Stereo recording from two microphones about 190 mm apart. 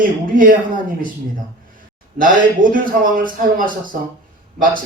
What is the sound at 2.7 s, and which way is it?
Speech, 45° right (ahead or behind).